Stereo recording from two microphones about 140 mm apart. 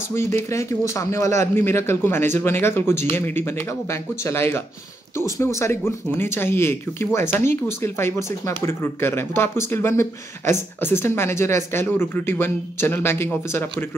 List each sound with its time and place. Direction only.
0.1 s speech: 20° left (ahead or behind)